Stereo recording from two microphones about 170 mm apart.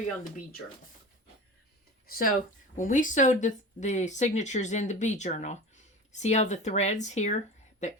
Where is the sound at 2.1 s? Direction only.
60° left (ahead or behind).